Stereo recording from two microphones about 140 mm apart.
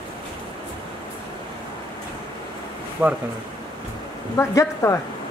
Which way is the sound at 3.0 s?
10° right (ahead or behind).